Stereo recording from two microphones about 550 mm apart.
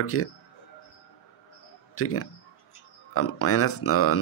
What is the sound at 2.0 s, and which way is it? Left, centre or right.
Speech, left.